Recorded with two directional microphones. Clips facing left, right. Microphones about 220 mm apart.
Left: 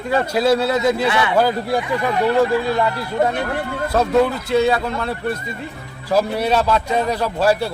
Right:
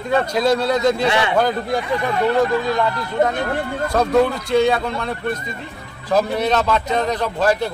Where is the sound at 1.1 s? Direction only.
25° right (ahead or behind).